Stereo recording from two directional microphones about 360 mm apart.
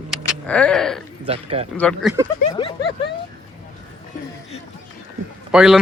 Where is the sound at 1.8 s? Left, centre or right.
Centre.